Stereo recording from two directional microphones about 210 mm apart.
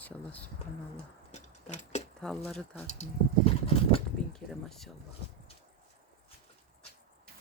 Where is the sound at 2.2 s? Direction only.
Centre (ahead or behind).